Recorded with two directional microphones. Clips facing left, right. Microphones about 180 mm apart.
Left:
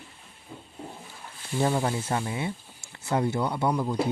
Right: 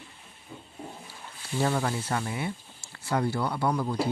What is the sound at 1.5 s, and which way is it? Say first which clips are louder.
Speech: left 2 dB; 20° left (ahead or behind).